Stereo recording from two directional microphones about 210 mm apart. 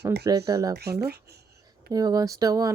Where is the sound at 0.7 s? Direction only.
50° right (ahead or behind).